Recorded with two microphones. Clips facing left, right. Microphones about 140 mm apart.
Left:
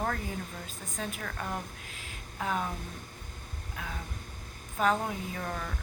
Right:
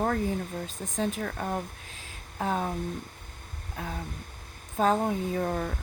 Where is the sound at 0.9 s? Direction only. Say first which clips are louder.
Right 7 dB; 40° right (ahead or behind).